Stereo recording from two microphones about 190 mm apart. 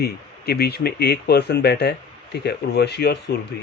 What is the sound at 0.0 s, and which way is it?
Speech, 55° left (ahead or behind).